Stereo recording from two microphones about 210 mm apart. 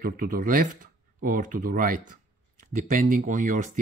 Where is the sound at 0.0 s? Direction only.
40° right (ahead or behind).